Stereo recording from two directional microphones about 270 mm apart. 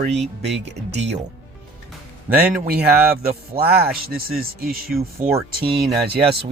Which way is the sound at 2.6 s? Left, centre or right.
Right.